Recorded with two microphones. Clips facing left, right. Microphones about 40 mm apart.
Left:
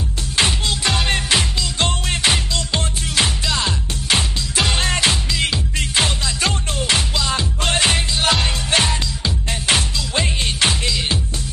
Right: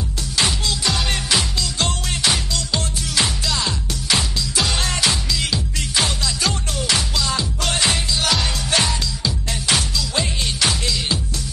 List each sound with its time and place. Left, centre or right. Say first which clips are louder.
0.4 s music: left 2 dB; left